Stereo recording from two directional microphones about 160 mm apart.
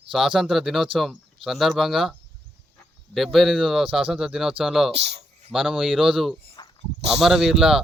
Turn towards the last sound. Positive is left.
turn(degrees=0)  # may be behind; listen again after turning